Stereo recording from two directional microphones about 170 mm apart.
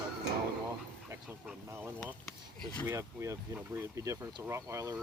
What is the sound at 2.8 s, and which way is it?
Speech, 15° right (ahead or behind).